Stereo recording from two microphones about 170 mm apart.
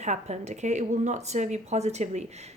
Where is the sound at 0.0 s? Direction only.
40° right (ahead or behind).